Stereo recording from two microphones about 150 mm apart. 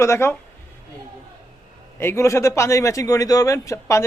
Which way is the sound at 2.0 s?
15° left (ahead or behind).